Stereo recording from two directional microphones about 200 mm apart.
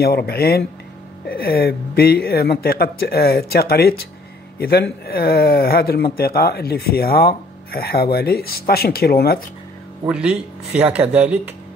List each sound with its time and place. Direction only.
0.0 s speech: 50° left (ahead or behind)
10.0 s speech: 5° right (ahead or behind)